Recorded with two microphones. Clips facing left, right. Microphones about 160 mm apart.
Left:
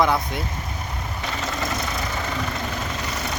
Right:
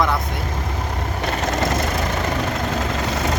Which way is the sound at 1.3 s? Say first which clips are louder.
Right 6 dB; 65° right (ahead or behind).